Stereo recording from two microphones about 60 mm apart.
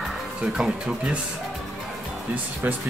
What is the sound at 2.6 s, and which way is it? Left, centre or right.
Speech, right.